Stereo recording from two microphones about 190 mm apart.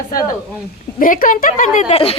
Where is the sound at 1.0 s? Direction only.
45° left (ahead or behind).